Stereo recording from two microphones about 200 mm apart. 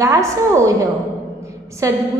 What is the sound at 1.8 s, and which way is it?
Speech, 15° right (ahead or behind).